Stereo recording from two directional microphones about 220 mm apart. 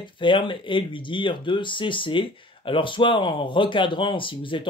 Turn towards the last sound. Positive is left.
turn(degrees=20)  # may be behind; listen again after turning